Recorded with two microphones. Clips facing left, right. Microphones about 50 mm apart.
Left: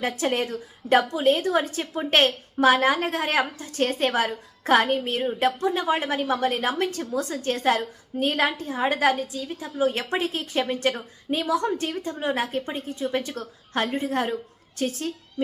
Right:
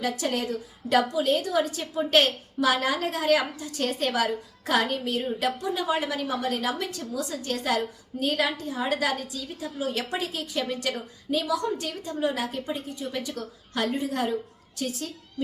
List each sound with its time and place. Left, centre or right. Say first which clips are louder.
0.0 s a woman's voice: left 3 dB; left